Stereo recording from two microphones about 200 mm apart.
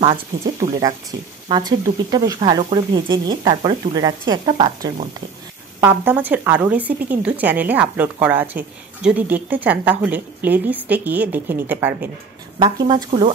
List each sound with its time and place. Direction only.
0.0 s speech: 20° right (ahead or behind)
5.8 s speech: 10° right (ahead or behind)
12.5 s speech: 25° right (ahead or behind)